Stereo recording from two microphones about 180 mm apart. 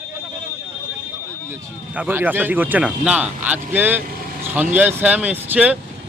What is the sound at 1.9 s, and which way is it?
Speech, 10° right (ahead or behind).